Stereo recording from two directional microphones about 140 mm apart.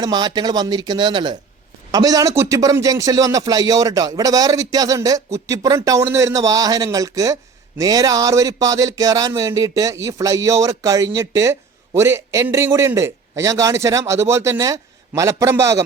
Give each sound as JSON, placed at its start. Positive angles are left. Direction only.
{"t": 0.0, "sound": "a man's voice", "side_deg": -30}